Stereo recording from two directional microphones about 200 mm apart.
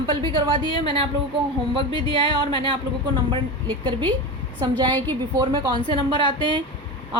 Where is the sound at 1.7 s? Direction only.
25° right (ahead or behind).